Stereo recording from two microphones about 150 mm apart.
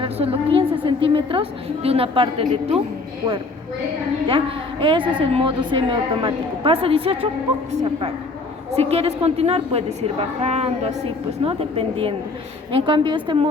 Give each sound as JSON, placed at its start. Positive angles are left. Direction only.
{"t": 0.0, "sound": "a woman's voice", "side_deg": -40}
{"t": 4.3, "sound": "a woman's voice", "side_deg": -35}
{"t": 8.7, "sound": "a woman's voice", "side_deg": -45}